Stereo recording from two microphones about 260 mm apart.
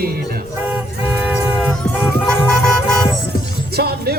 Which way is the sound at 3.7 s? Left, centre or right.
Right.